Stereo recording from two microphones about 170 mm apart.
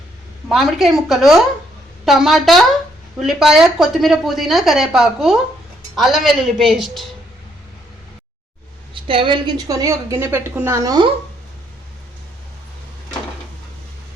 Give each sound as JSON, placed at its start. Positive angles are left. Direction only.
{"t": 0.4, "sound": "speech", "side_deg": 0}
{"t": 9.0, "sound": "a woman's voice", "side_deg": -30}